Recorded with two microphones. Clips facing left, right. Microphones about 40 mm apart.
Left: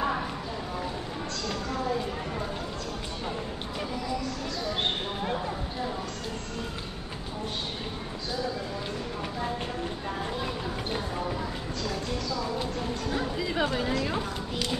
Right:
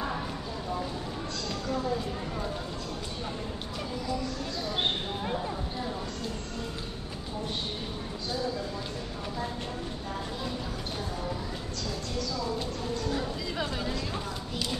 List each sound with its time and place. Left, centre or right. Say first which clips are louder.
13.1 s chatter: left 3 dB; left